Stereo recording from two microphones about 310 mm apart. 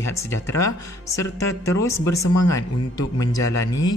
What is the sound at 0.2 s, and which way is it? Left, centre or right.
A man's voice, centre.